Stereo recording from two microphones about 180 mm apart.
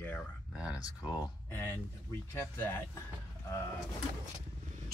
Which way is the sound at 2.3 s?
10° left (ahead or behind).